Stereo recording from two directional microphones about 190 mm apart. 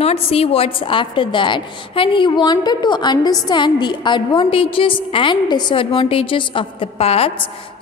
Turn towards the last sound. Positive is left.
turn(degrees=30)  # may be behind; listen again after turning